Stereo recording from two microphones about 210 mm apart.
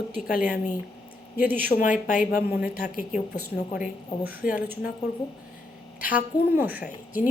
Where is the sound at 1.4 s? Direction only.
10° right (ahead or behind).